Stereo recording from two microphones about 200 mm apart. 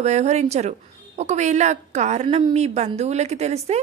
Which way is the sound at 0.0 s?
35° right (ahead or behind).